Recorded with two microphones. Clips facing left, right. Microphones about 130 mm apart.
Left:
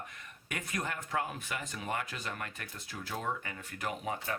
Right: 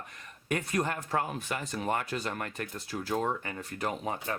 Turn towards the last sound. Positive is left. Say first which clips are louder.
# right 3 dB
turn(degrees=-35)  # may be behind; listen again after turning